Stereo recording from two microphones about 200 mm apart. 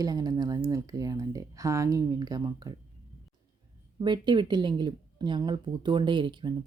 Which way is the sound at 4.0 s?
20° right (ahead or behind).